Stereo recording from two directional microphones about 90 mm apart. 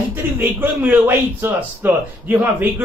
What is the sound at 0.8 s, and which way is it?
Speech, 10° right (ahead or behind).